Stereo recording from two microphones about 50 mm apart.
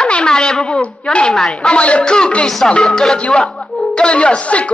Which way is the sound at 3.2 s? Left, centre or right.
Left.